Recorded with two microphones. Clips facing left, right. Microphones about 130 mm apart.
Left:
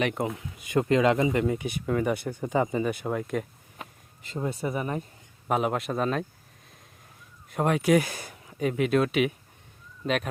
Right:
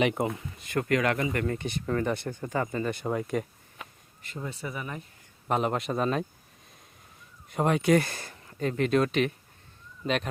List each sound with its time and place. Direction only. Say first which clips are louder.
0.2 s speech: even; centre (ahead or behind)
0.6 s speech: left 4 dB; 15° left (ahead or behind)
1.5 s speech: left 2 dB; 5° left (ahead or behind)
4.4 s speech: left 7 dB; 40° left (ahead or behind)
5.5 s speech: left 1 dB; 5° left (ahead or behind)
7.5 s speech: left 1 dB; centre (ahead or behind)